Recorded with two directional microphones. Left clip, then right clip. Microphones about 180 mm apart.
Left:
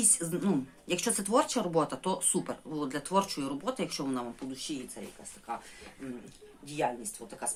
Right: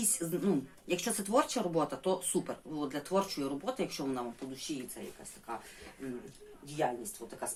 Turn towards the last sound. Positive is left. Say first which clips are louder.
# left 1 dB
turn(degrees=20)  # may be behind; listen again after turning